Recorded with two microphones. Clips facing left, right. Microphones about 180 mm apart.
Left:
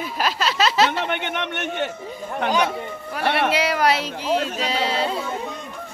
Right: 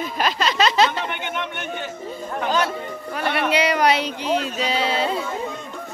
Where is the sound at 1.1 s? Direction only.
70° left (ahead or behind).